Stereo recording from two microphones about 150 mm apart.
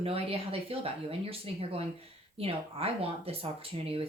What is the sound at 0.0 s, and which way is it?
Speech, 40° right (ahead or behind).